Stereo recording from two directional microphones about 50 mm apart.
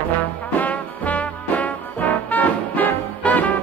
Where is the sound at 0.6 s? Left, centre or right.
Left.